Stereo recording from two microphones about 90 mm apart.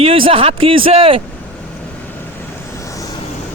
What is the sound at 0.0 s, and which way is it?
Speech, 90° right.